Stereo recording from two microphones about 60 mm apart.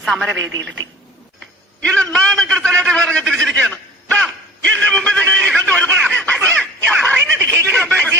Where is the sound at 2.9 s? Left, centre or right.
Centre.